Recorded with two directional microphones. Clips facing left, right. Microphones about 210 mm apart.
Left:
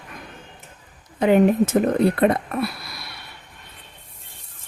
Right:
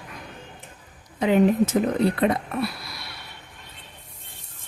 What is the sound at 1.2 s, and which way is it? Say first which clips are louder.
Speech: left 3 dB; 55° left (ahead or behind).